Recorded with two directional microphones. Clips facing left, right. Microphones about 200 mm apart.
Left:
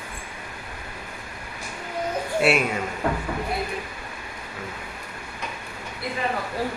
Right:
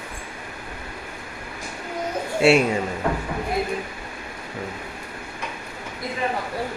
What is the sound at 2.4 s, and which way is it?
Speech, 30° right (ahead or behind).